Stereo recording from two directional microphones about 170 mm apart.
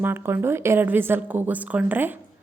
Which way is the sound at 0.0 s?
15° right (ahead or behind).